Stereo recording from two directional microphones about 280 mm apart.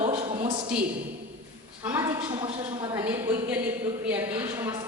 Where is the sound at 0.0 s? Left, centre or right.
Right.